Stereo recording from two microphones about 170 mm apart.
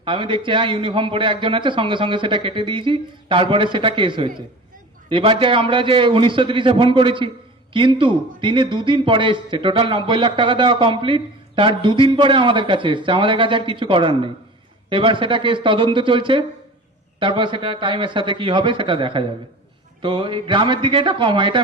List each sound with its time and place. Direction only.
0.0 s a man's voice: 30° right (ahead or behind)